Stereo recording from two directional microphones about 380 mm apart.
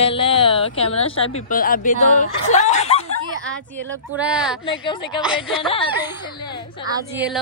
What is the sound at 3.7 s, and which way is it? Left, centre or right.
Speech, centre.